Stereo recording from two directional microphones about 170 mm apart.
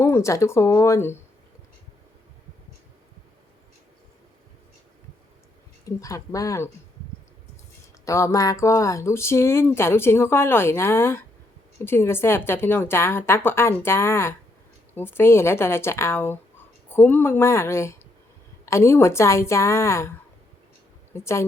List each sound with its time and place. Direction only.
0.0 s speech: 15° left (ahead or behind)
5.8 s speech: 20° left (ahead or behind)
8.0 s speech: 20° left (ahead or behind)
21.1 s speech: 15° left (ahead or behind)